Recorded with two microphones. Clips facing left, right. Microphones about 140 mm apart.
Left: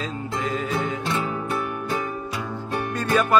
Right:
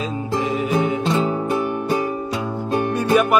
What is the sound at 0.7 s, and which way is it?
Music, 15° right (ahead or behind).